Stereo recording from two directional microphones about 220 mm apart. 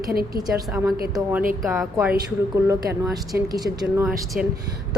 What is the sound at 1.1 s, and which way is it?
Speech, 5° right (ahead or behind).